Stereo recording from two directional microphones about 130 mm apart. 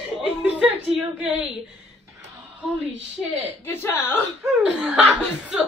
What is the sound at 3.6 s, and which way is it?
Speech, 20° left (ahead or behind).